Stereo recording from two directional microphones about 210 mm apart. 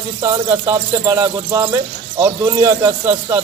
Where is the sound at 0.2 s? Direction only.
15° right (ahead or behind).